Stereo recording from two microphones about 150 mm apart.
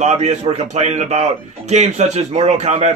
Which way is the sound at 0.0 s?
50° right (ahead or behind).